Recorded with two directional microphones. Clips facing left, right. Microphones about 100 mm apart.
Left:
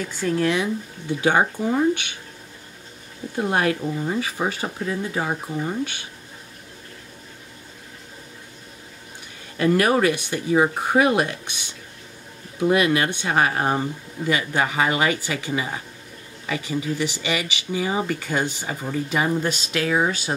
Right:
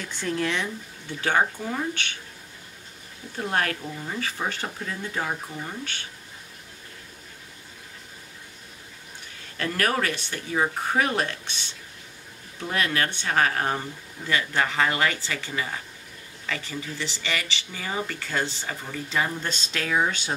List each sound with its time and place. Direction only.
0.0 s speech: 5° left (ahead or behind)
1.2 s speech: 15° left (ahead or behind)
3.3 s speech: 15° left (ahead or behind)
9.6 s speech: 15° left (ahead or behind)